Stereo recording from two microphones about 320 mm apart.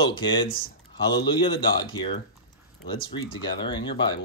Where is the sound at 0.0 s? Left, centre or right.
Centre.